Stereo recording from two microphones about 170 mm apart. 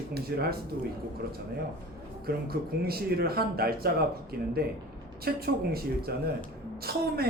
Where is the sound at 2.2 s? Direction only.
65° right (ahead or behind).